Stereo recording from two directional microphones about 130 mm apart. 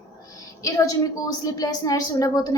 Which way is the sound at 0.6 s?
25° left (ahead or behind).